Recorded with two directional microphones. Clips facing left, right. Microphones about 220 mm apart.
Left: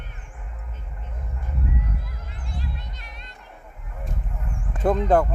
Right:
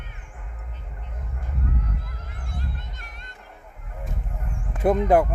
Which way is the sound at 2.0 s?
50° right (ahead or behind).